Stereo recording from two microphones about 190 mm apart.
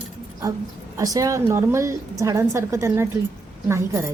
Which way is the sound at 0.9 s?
20° right (ahead or behind).